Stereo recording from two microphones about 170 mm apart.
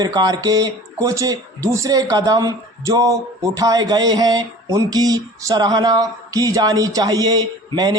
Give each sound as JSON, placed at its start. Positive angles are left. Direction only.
{"t": 0.0, "sound": "speech", "side_deg": -20}